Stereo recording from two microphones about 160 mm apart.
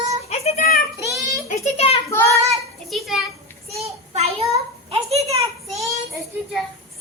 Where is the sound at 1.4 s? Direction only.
45° left (ahead or behind).